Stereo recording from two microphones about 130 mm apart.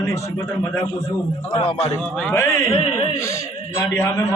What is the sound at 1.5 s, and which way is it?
Speech, 50° left (ahead or behind).